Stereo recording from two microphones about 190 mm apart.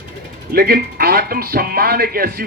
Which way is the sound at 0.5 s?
50° right (ahead or behind).